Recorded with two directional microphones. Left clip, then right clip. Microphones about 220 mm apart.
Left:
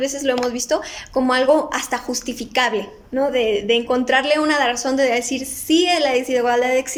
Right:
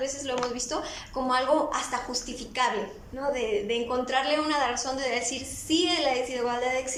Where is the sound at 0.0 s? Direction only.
35° left (ahead or behind).